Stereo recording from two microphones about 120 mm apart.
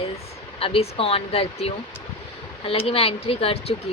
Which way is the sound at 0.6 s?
50° left (ahead or behind).